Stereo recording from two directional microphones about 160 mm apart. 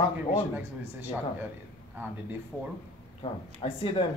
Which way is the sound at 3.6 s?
35° left (ahead or behind).